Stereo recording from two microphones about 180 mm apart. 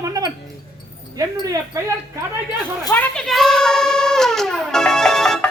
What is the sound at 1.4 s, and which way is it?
Speech, 20° right (ahead or behind).